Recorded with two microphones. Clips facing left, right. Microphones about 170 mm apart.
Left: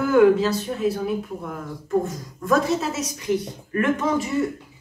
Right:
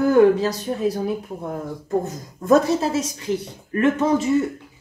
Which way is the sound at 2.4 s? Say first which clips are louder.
Right 4 dB; 30° right (ahead or behind).